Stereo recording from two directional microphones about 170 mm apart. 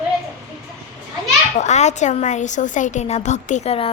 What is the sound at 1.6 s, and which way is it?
A woman's voice, 45° left (ahead or behind).